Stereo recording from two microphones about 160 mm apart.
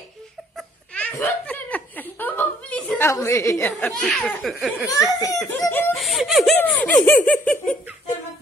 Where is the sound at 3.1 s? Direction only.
20° left (ahead or behind).